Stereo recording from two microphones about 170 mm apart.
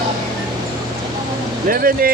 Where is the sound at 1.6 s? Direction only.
55° right (ahead or behind).